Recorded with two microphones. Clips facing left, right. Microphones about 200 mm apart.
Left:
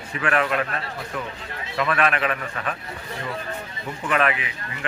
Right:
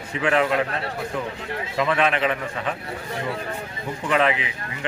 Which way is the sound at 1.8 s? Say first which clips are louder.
Right 1 dB; 20° right (ahead or behind).